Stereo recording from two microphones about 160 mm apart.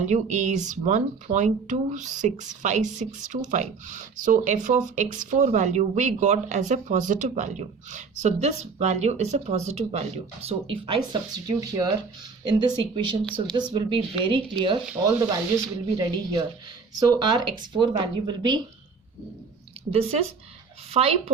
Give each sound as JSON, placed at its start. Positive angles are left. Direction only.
{"t": 0.0, "sound": "speech", "side_deg": -50}
{"t": 19.9, "sound": "speech", "side_deg": -40}